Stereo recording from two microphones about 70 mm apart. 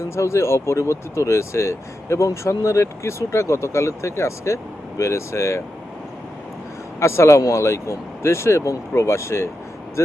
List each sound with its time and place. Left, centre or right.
0.2 s speech: left
7.0 s speech: left